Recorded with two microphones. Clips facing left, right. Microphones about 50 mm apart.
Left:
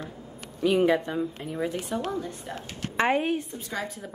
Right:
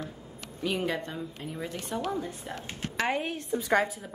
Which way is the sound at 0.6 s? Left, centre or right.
Centre.